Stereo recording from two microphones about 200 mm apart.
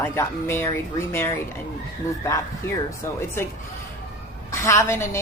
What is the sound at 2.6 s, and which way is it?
Speech, 15° left (ahead or behind).